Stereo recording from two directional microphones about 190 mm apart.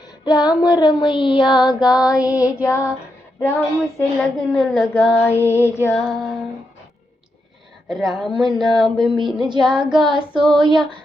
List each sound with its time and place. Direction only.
0.3 s child singing: 20° left (ahead or behind)
2.4 s female singing: 15° left (ahead or behind)
3.4 s a woman's voice: 5° left (ahead or behind)
5.0 s female singing: 5° left (ahead or behind)
7.9 s a woman's voice: centre (ahead or behind)
9.1 s child singing: 25° right (ahead or behind)
9.6 s a woman's voice: 5° right (ahead or behind)
10.0 s child singing: 25° right (ahead or behind)